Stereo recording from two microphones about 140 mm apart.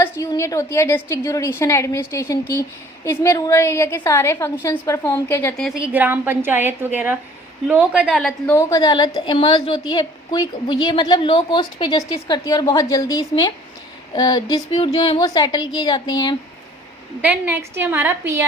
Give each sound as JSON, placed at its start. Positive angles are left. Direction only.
{"t": 0.0, "sound": "a woman's voice", "side_deg": 20}
{"t": 5.5, "sound": "a woman's voice", "side_deg": 0}
{"t": 8.4, "sound": "a woman's voice", "side_deg": 20}
{"t": 17.2, "sound": "a woman's voice", "side_deg": -10}